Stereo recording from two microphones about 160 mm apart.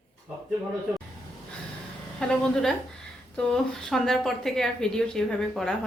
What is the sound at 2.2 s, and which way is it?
A woman's voice, 5° left (ahead or behind).